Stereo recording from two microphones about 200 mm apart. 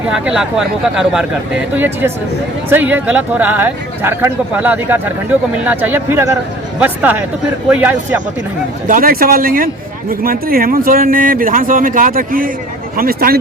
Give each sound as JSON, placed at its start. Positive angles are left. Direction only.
{"t": 0.0, "sound": "speech", "side_deg": -5}
{"t": 8.9, "sound": "speech", "side_deg": -45}